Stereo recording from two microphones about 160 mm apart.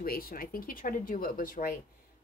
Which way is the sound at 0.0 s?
65° left (ahead or behind).